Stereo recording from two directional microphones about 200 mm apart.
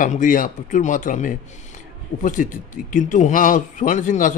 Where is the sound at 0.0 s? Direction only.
40° left (ahead or behind).